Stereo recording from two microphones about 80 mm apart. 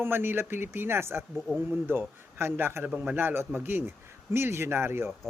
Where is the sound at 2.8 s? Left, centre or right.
Centre.